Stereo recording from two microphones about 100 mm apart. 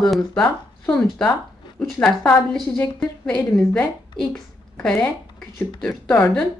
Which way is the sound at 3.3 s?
15° left (ahead or behind).